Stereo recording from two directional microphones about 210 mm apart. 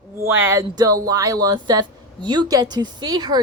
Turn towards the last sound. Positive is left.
turn(degrees=-20)  # may be behind; listen again after turning